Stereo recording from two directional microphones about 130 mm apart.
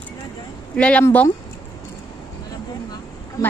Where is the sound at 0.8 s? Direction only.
10° left (ahead or behind).